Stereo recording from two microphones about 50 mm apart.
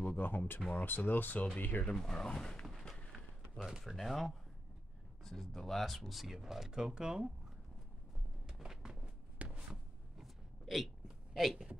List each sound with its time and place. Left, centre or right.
0.0 s speech: left
2.0 s speech: centre
3.1 s a sound: centre
3.8 s speech: centre
8.5 s a sound: centre
10.1 s hiccup: centre
11.5 s a woman's voice: centre